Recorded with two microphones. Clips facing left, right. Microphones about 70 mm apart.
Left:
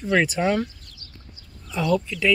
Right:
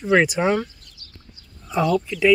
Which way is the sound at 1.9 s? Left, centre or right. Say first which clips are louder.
Right 1 dB; centre.